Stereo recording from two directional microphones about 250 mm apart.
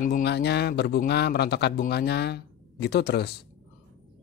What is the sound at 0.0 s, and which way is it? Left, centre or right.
A man's voice, left.